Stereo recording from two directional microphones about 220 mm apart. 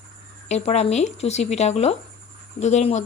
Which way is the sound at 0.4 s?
30° left (ahead or behind).